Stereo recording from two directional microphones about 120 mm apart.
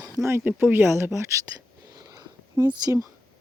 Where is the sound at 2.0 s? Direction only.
30° right (ahead or behind).